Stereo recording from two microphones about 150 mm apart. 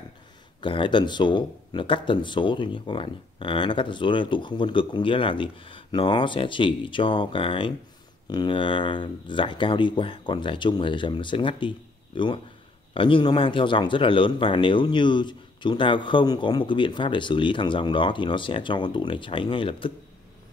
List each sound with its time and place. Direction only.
0.6 s speech: 35° left (ahead or behind)